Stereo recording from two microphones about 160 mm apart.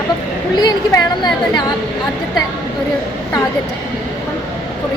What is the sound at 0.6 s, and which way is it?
Speech, 25° left (ahead or behind).